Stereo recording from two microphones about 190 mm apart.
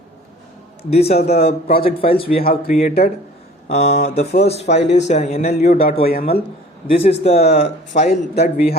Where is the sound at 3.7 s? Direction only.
60° left (ahead or behind).